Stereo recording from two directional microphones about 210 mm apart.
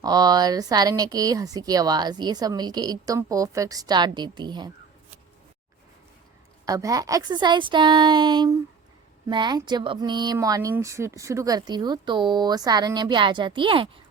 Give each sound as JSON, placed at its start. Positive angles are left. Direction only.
{"t": 0.0, "sound": "speech", "side_deg": -20}
{"t": 6.7, "sound": "speech", "side_deg": -15}